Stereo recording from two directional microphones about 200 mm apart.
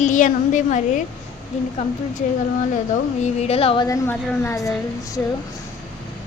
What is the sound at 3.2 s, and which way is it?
Speech, 30° left (ahead or behind).